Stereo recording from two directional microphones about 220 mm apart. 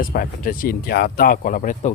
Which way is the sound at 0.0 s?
40° left (ahead or behind).